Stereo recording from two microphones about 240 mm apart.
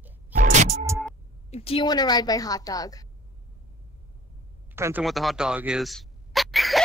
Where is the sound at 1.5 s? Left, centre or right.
Left.